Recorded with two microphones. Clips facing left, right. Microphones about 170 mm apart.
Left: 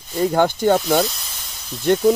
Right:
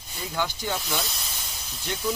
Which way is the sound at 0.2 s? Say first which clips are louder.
Left 14 dB; 55° left (ahead or behind).